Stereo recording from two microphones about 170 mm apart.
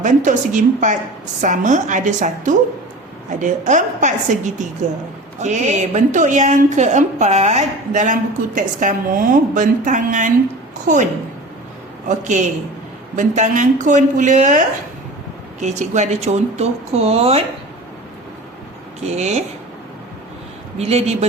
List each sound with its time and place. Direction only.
0.0 s a woman's voice: 50° right (ahead or behind)
5.4 s a woman's voice: 45° right (ahead or behind)
15.6 s speech: 45° right (ahead or behind)
19.0 s speech: 40° right (ahead or behind)
20.7 s speech: 40° right (ahead or behind)